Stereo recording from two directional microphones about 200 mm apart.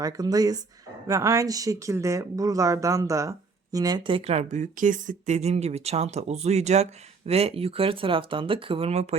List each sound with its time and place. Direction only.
0.0 s speech: 20° right (ahead or behind)